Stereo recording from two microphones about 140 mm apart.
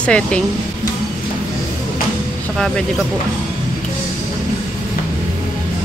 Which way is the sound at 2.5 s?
Centre (ahead or behind).